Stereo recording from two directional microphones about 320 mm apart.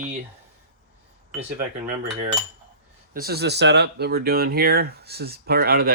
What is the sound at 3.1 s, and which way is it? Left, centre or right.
Speech, right.